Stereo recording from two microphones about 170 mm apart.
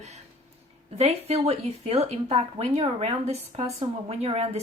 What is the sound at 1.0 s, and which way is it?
Speech, 40° right (ahead or behind).